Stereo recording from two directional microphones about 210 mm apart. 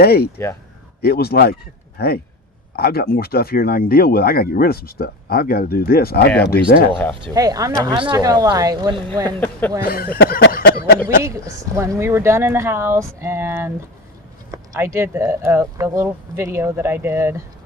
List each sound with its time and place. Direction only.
0.0 s speech: 50° left (ahead or behind)
6.9 s speech: 5° left (ahead or behind)
7.2 s speech: 15° right (ahead or behind)
9.4 s speech: 10° left (ahead or behind)
9.8 s speech: 45° left (ahead or behind)
11.2 s speech: 15° right (ahead or behind)